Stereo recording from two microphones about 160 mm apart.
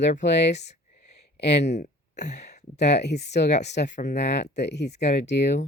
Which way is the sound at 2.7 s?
90° left.